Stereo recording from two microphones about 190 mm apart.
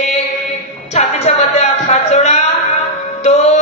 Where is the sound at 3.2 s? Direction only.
35° left (ahead or behind).